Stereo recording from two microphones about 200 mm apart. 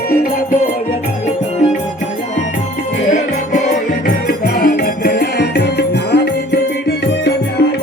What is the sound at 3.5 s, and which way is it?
Music, 35° left (ahead or behind).